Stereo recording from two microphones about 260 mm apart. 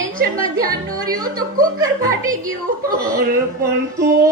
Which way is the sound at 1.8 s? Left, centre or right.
Centre.